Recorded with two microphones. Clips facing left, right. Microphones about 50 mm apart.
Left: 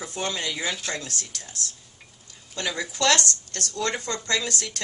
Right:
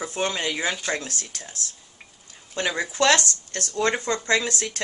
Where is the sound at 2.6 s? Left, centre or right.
Right.